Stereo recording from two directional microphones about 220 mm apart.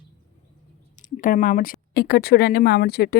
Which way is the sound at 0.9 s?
35° left (ahead or behind).